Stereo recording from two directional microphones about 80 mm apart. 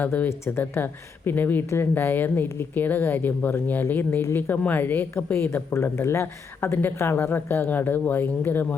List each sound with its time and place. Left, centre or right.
0.0 s a woman's voice: centre
0.3 s a woman's voice: left